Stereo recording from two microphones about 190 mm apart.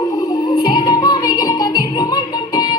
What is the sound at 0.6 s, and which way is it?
Music, 25° left (ahead or behind).